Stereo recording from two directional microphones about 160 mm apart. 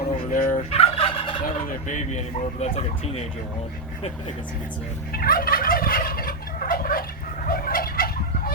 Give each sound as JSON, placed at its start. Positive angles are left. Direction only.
{"t": 0.3, "sound": "turkey", "side_deg": 60}
{"t": 0.7, "sound": "fowl", "side_deg": 35}
{"t": 2.0, "sound": "speech", "side_deg": 45}
{"t": 5.1, "sound": "fowl", "side_deg": 70}